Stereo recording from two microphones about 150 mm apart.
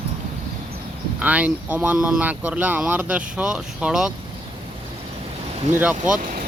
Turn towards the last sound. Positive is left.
turn(degrees=-65)  # may be behind; listen again after turning